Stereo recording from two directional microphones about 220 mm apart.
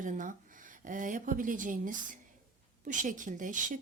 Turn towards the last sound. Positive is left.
turn(degrees=-35)  # may be behind; listen again after turning